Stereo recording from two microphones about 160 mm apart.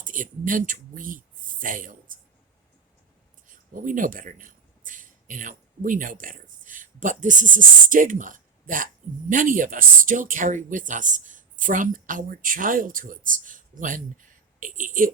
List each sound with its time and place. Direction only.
0.0 s speech: 55° right (ahead or behind)
3.4 s speech: 55° right (ahead or behind)